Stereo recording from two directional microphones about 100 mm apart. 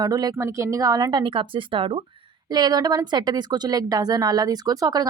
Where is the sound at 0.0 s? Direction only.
40° right (ahead or behind).